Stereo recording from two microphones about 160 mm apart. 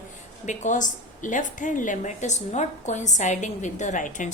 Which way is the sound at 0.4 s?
50° left (ahead or behind).